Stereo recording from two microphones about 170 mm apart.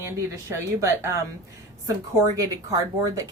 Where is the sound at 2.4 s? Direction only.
20° right (ahead or behind).